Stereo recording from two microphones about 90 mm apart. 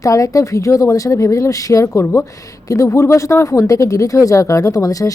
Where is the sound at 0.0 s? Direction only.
40° left (ahead or behind).